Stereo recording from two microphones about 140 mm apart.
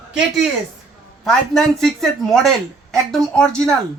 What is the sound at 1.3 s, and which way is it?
Speech, 5° left (ahead or behind).